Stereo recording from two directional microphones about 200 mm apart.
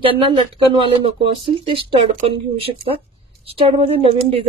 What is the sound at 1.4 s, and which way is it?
Speech, 25° right (ahead or behind).